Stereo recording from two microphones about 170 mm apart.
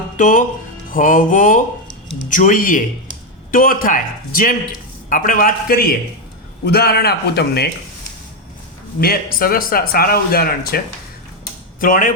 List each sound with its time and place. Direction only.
0.2 s music: 50° left (ahead or behind)
3.5 s a man's voice: 55° left (ahead or behind); by 7.7 s 70° left (ahead or behind)
9.0 s speech: 60° left (ahead or behind)
11.8 s music: 50° left (ahead or behind)